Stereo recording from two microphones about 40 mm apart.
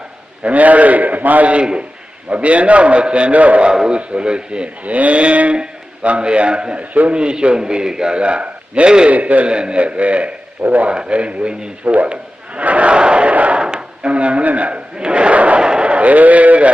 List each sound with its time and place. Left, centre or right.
0.4 s a man's voice: right
3.7 s a man's voice: right
4.9 s a man's voice: right
9.0 s a man's voice: right
10.8 s a man's voice: right
12.5 s a sound: right
13.6 s speech: right
14.9 s battle cry: right
15.6 s a man's voice: right